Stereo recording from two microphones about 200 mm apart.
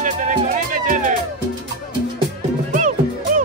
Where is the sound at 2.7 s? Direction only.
40° right (ahead or behind).